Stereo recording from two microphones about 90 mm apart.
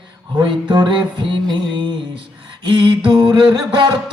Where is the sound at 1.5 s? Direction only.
70° right (ahead or behind).